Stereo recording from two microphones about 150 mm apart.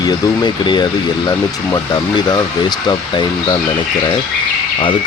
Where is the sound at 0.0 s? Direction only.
30° left (ahead or behind).